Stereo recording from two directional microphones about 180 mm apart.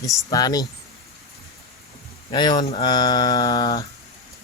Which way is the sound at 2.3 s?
25° left (ahead or behind).